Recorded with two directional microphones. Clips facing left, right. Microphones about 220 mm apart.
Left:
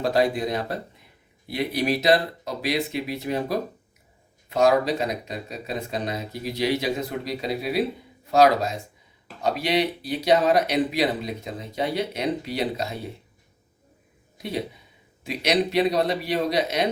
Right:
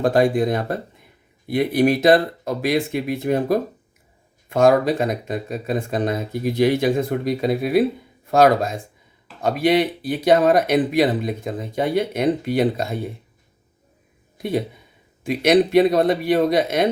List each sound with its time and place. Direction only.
0.0 s speech: 50° right (ahead or behind)
14.3 s speech: 50° right (ahead or behind)